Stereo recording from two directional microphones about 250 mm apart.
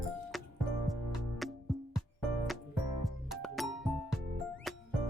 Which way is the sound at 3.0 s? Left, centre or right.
Centre.